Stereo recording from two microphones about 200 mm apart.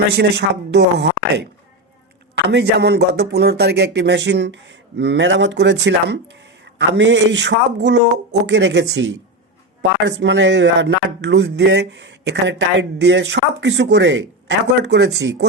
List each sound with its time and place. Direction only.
0.1 s speech: 60° right (ahead or behind)
2.5 s speech: 60° right (ahead or behind)